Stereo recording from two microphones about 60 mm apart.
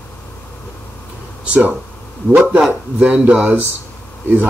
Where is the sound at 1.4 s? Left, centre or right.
Right.